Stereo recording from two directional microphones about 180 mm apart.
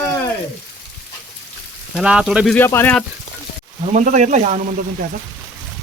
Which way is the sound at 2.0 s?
5° right (ahead or behind).